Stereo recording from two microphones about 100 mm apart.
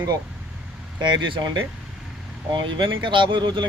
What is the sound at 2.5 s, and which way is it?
Speech, 50° right (ahead or behind).